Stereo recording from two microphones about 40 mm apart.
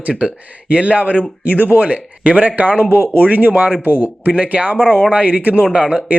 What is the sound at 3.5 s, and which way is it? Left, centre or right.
Speech, right.